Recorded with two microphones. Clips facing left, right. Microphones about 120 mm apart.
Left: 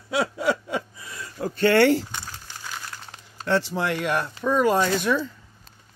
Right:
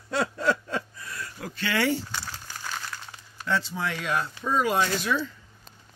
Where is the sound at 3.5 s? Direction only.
70° left (ahead or behind); by 5.2 s 50° left (ahead or behind).